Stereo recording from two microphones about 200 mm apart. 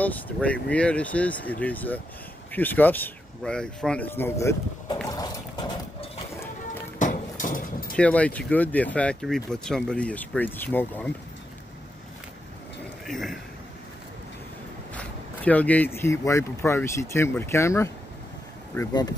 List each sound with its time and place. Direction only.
0.0 s speech: 5° left (ahead or behind)
5.1 s music: 20° left (ahead or behind)
7.0 s a sound: 40° left (ahead or behind)
7.9 s speech: 5° left (ahead or behind)
13.0 s a man's voice: centre (ahead or behind)
15.0 s speech: 5° left (ahead or behind)